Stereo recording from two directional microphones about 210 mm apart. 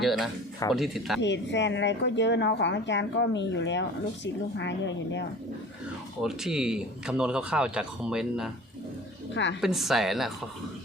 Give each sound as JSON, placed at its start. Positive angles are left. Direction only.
{"t": 0.0, "sound": "speech", "side_deg": 0}
{"t": 1.2, "sound": "a woman's voice", "side_deg": 55}
{"t": 6.2, "sound": "speech", "side_deg": 0}
{"t": 9.3, "sound": "a woman's voice", "side_deg": 60}
{"t": 9.6, "sound": "speech", "side_deg": 0}